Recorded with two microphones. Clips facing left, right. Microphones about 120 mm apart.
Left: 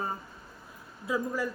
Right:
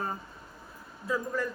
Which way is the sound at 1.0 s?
10° left (ahead or behind).